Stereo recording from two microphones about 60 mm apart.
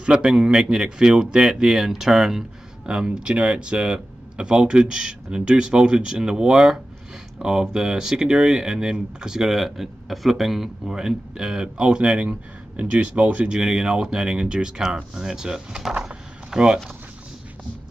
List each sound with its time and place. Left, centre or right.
0.0 s a man's voice: centre